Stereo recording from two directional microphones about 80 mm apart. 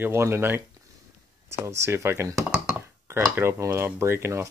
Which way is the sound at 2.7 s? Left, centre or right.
Right.